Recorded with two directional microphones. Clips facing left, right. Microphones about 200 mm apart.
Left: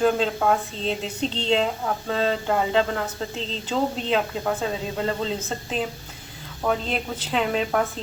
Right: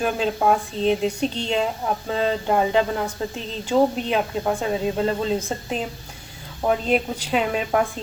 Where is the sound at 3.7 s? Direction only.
15° right (ahead or behind).